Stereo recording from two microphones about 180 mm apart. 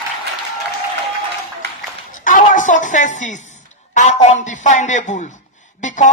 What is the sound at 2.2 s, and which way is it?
A woman's voice, 45° left (ahead or behind).